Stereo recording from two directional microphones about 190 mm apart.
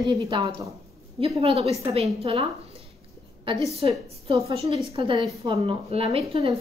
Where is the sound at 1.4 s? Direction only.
30° right (ahead or behind).